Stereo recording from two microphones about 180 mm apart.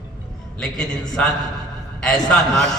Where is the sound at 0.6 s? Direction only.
5° left (ahead or behind).